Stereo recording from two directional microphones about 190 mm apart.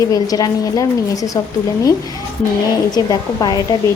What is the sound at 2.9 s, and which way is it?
Speech, 20° left (ahead or behind).